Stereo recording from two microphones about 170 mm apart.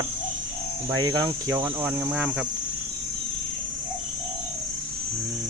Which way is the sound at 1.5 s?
10° right (ahead or behind).